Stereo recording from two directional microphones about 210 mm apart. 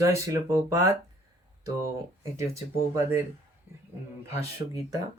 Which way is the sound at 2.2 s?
15° right (ahead or behind).